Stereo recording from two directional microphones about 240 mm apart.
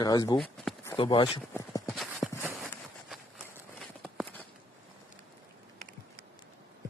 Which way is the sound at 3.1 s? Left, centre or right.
Centre.